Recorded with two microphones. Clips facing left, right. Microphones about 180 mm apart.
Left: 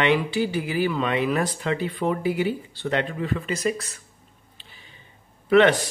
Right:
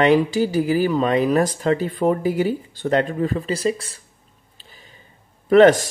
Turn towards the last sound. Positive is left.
turn(degrees=-40)  # may be behind; listen again after turning